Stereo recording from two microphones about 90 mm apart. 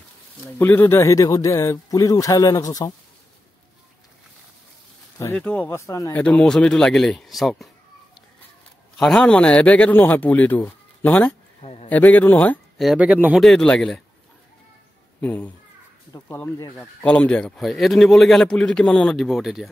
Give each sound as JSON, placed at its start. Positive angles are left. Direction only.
{"t": 0.6, "sound": "speech", "side_deg": 25}
{"t": 5.2, "sound": "a man's voice", "side_deg": 20}
{"t": 5.7, "sound": "speech", "side_deg": 35}
{"t": 6.1, "sound": "a man's voice", "side_deg": 15}
{"t": 8.9, "sound": "a man's voice", "side_deg": 5}
{"t": 12.9, "sound": "speech", "side_deg": -15}
{"t": 13.4, "sound": "a man's voice", "side_deg": 5}
{"t": 15.1, "sound": "a man's voice", "side_deg": 15}
{"t": 16.1, "sound": "speech", "side_deg": 50}
{"t": 17.0, "sound": "a man's voice", "side_deg": 15}
{"t": 17.6, "sound": "a man's voice", "side_deg": 0}